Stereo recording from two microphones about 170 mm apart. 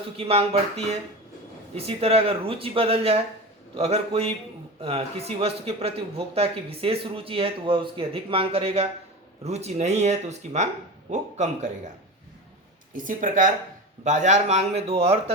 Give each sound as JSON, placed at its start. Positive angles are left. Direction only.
{"t": 0.2, "sound": "a man's voice", "side_deg": -35}
{"t": 12.9, "sound": "a man's voice", "side_deg": -50}